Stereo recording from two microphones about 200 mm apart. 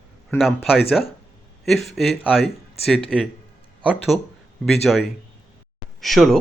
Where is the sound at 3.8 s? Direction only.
Centre (ahead or behind).